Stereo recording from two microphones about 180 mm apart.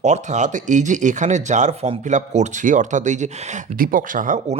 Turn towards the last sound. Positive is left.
turn(degrees=-45)  # may be behind; listen again after turning